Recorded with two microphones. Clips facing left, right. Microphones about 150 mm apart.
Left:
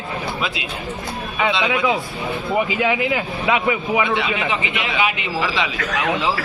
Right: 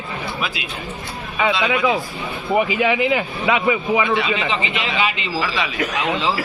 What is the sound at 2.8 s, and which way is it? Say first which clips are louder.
A man's voice: right 2 dB; 5° left (ahead or behind).